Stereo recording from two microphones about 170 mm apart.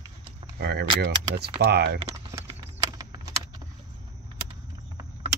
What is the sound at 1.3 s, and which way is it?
Speech, 70° right (ahead or behind).